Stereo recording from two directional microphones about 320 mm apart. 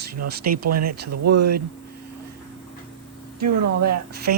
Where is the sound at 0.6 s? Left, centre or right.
Right.